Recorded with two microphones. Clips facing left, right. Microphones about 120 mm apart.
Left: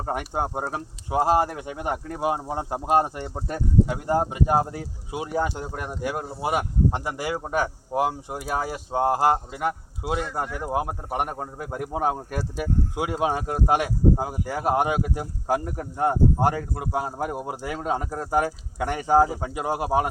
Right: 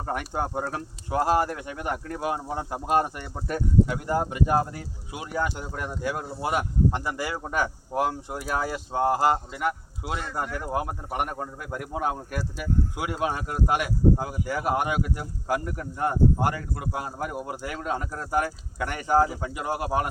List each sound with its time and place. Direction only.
0.0 s speech: 20° left (ahead or behind)
11.3 s speech: 30° left (ahead or behind)